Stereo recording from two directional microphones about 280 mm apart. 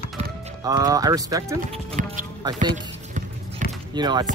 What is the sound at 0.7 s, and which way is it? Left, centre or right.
Speech, centre.